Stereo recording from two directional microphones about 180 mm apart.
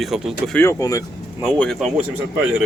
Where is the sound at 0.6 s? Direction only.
15° left (ahead or behind).